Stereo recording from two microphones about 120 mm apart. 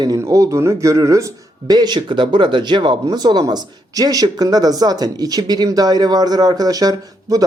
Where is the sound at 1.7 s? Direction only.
35° right (ahead or behind).